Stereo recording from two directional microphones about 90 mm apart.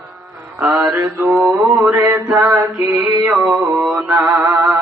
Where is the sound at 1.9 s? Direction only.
40° right (ahead or behind).